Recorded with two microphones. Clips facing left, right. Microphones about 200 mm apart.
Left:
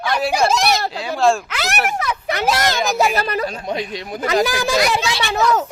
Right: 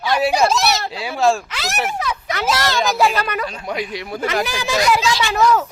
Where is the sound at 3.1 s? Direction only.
30° left (ahead or behind).